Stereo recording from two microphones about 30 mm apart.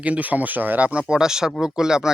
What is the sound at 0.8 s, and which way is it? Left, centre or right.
Speech, right.